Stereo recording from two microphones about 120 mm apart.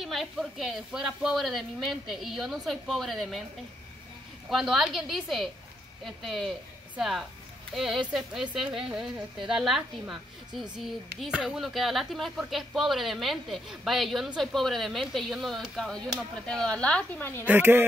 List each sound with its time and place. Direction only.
0.0 s a woman's voice: centre (ahead or behind)
4.5 s a woman's voice: 5° right (ahead or behind); by 17.5 s 20° left (ahead or behind)
17.5 s speech: 15° right (ahead or behind)